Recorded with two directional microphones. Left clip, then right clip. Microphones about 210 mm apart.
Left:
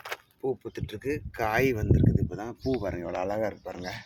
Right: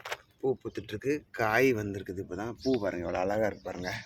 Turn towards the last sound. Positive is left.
turn(degrees=-5)  # may be behind; listen again after turning